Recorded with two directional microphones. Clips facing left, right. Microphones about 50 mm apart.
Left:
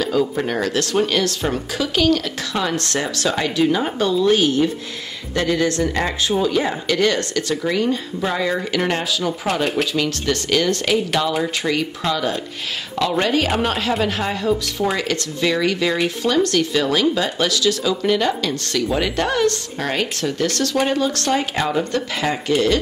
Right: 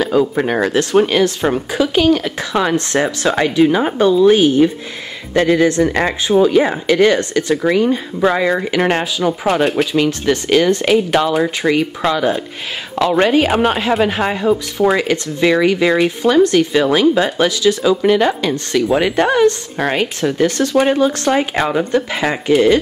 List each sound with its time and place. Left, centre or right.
0.0 s speech: right
8.2 s speech: right